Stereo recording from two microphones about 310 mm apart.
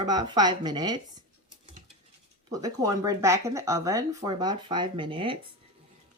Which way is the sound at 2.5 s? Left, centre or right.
Centre.